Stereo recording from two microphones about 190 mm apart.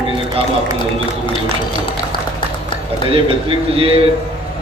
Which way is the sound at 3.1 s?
30° right (ahead or behind).